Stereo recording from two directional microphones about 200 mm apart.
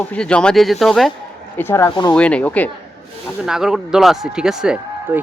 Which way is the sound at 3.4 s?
Centre (ahead or behind).